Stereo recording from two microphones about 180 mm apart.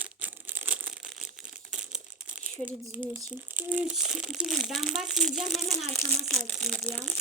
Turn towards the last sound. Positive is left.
turn(degrees=10)  # may be behind; listen again after turning